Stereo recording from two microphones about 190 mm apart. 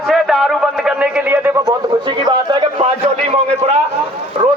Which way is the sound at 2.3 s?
25° right (ahead or behind).